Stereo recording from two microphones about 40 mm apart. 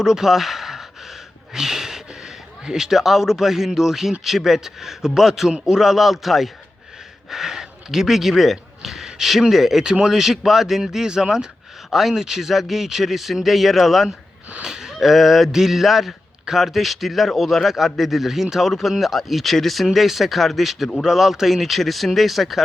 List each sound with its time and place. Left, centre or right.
0.0 s a man's voice: centre
9.8 s a man's voice: centre
14.6 s a sound: centre
15.0 s a man's voice: centre